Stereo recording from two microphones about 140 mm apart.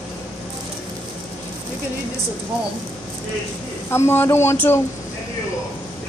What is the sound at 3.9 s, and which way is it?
Speech, 15° left (ahead or behind).